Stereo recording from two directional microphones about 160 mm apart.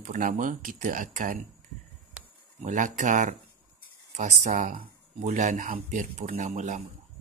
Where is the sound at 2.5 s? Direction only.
50° right (ahead or behind).